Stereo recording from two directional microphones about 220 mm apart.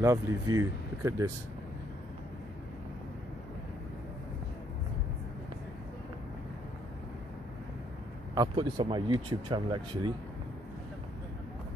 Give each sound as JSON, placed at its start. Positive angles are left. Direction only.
{"t": 0.0, "sound": "speech", "side_deg": -15}
{"t": 8.4, "sound": "speech", "side_deg": -20}